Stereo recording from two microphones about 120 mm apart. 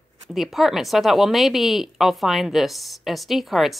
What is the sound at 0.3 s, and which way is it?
A woman's voice, centre (ahead or behind).